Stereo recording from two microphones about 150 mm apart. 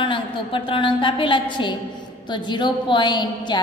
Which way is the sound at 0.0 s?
35° left (ahead or behind).